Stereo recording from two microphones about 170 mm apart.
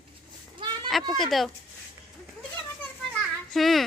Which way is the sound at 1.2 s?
Centre (ahead or behind).